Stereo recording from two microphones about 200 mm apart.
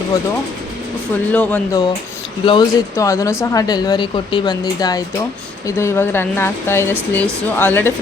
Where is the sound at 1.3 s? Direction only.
5° left (ahead or behind).